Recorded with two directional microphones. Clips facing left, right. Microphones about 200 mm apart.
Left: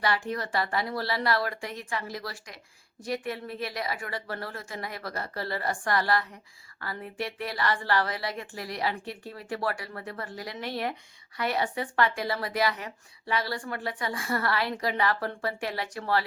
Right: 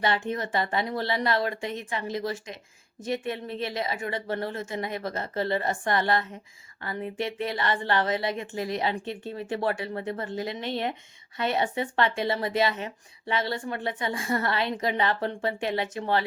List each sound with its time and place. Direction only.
0.0 s speech: 25° right (ahead or behind)